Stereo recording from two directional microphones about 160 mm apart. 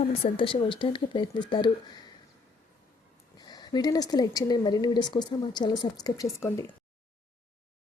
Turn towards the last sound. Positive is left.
turn(degrees=15)  # may be behind; listen again after turning